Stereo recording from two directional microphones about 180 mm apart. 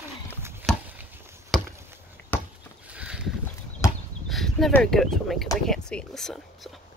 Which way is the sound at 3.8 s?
15° left (ahead or behind).